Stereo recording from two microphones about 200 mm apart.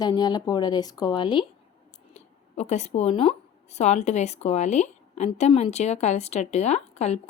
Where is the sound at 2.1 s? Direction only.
35° left (ahead or behind).